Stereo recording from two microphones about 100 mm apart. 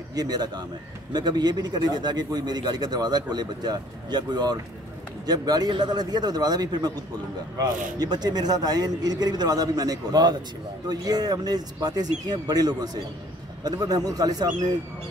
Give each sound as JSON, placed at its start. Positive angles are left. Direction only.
{"t": 0.1, "sound": "a man's voice", "side_deg": -40}